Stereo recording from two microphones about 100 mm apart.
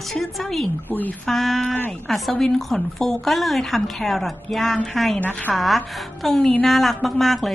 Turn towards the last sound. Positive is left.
turn(degrees=0)  # may be behind; listen again after turning